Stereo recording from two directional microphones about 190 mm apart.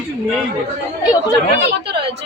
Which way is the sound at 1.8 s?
60° right (ahead or behind).